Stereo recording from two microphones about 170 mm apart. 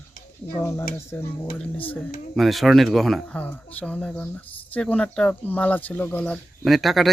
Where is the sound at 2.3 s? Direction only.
Centre (ahead or behind).